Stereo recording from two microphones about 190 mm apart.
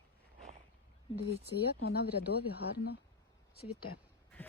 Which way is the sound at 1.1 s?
30° left (ahead or behind).